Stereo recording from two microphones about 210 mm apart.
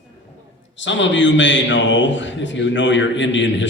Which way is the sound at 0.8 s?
60° left (ahead or behind).